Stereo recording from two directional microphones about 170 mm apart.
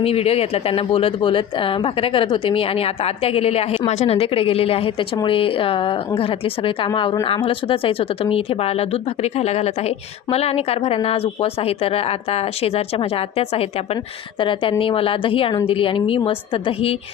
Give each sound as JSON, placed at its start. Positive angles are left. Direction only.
{"t": 0.0, "sound": "a woman's voice", "side_deg": 35}